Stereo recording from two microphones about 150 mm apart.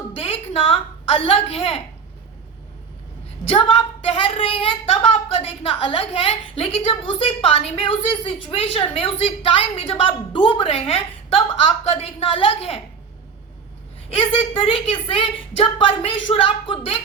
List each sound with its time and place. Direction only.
0.2 s a woman's voice: 40° left (ahead or behind)
3.5 s a woman's voice: 40° left (ahead or behind)
14.2 s a woman's voice: 40° left (ahead or behind)